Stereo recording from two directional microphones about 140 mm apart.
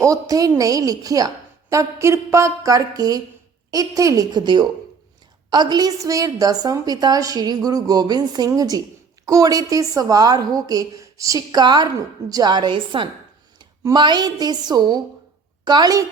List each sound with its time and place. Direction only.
0.0 s a woman's voice: 25° right (ahead or behind)